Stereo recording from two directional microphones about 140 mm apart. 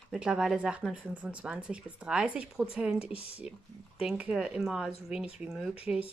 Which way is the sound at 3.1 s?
45° left (ahead or behind).